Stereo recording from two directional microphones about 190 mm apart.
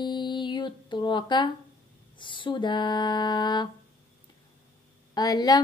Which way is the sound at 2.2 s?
25° left (ahead or behind).